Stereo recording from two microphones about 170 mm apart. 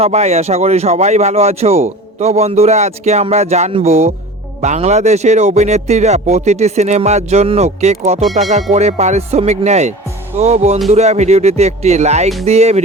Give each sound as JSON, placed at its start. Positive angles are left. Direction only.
{"t": 0.0, "sound": "speech", "side_deg": -40}